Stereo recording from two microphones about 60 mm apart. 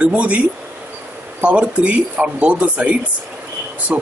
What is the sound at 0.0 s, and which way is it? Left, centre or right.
Speech, right.